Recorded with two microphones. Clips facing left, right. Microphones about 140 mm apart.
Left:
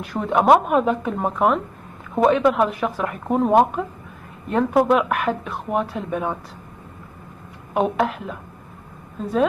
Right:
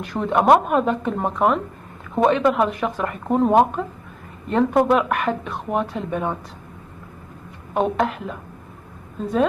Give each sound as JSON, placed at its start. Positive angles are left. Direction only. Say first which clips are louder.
{"t": 0.0, "sound": "speech", "louder": "even", "side_deg": 0}
{"t": 7.7, "sound": "speech", "louder": "even", "side_deg": 5}